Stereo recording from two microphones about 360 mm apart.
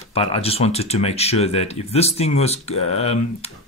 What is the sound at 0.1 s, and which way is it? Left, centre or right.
Speech, centre.